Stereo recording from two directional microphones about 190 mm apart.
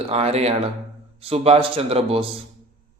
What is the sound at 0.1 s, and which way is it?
A man's voice, 35° right (ahead or behind).